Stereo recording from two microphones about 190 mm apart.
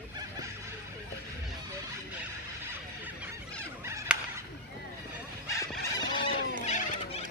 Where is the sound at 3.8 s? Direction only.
15° right (ahead or behind).